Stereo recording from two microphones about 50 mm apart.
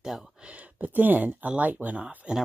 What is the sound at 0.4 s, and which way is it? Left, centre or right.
Speech, right.